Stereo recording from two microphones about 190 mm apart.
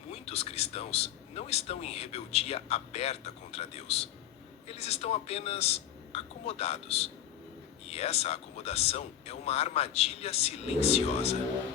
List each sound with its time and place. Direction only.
0.1 s a man's voice: 35° left (ahead or behind)